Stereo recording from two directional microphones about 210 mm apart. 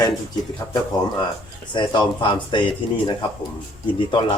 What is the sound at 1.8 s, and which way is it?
Speech, 20° left (ahead or behind).